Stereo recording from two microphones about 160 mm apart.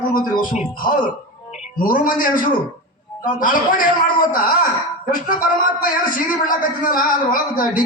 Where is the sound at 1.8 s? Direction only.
60° left (ahead or behind).